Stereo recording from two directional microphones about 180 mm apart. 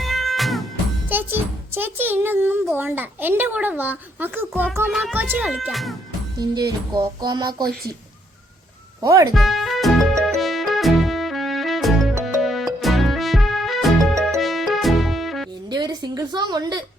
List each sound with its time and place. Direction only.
0.0 s cat: centre (ahead or behind)
1.0 s a child's voice: 10° right (ahead or behind)
6.4 s music: 20° right (ahead or behind)
9.0 s speech: 20° right (ahead or behind)
9.3 s music: centre (ahead or behind)
15.7 s a sound: 20° right (ahead or behind)